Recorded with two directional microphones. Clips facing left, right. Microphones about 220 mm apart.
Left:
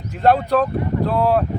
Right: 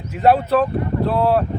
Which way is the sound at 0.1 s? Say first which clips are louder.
Right 1 dB; 5° right (ahead or behind).